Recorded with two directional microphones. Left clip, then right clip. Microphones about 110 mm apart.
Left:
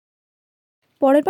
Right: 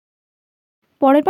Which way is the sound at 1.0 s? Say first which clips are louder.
Right 2 dB; 10° right (ahead or behind).